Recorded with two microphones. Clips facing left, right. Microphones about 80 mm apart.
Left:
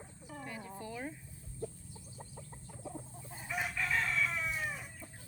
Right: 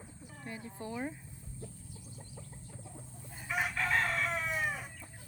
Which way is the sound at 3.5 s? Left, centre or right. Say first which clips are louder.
Right 3 dB; right.